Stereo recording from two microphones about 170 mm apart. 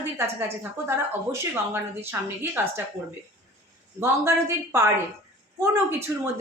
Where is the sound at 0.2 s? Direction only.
15° right (ahead or behind).